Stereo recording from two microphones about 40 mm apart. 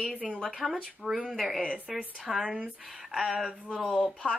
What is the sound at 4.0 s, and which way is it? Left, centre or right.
Speech, left.